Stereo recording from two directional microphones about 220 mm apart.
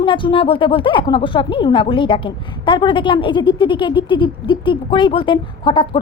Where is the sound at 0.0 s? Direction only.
20° left (ahead or behind).